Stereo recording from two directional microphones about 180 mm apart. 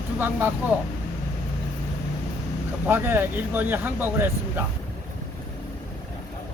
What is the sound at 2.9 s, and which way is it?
Speech, 10° right (ahead or behind).